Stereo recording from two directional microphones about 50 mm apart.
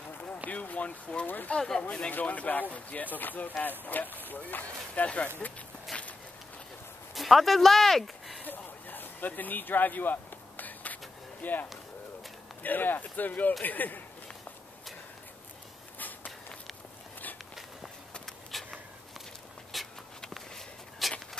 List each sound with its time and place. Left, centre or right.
0.5 s a sound: left
1.2 s speech: left
1.5 s speech: centre
1.9 s speech: left
5.9 s walk: centre
7.2 s speech: centre
8.5 s speech: left
10.6 s a sound: left
11.4 s speech: left
12.6 s a man's voice: left
18.5 s a sound: centre
19.7 s a sound: centre